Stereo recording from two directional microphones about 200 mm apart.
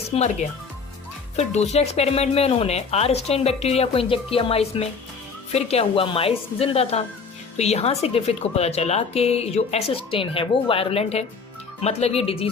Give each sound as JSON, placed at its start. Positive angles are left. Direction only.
{"t": 0.1, "sound": "speech", "side_deg": 30}
{"t": 1.4, "sound": "speech", "side_deg": 35}